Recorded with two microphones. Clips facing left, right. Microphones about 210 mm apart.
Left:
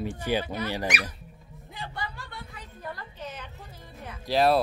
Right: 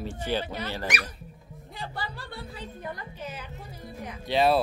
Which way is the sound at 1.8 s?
35° right (ahead or behind).